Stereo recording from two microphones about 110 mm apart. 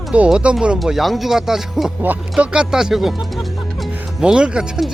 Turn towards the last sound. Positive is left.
turn(degrees=-5)  # may be behind; listen again after turning